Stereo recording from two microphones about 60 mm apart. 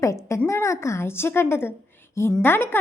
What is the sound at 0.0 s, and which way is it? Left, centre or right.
A woman's voice, left.